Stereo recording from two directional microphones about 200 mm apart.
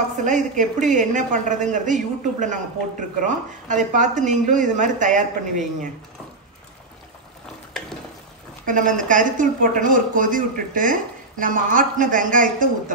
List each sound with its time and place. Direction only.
0.2 s a woman's voice: 40° right (ahead or behind)
8.6 s a woman's voice: 40° right (ahead or behind)